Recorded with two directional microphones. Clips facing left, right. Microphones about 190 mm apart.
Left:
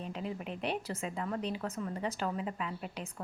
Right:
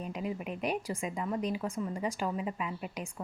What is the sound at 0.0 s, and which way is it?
A woman's voice, 10° right (ahead or behind).